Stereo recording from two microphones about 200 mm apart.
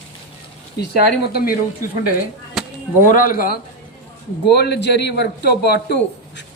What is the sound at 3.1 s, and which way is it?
A man's voice, 45° left (ahead or behind).